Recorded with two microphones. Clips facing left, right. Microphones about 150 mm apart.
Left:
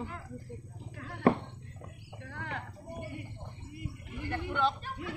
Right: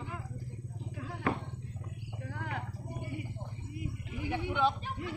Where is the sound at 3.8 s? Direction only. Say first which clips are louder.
Right 2 dB; 5° right (ahead or behind).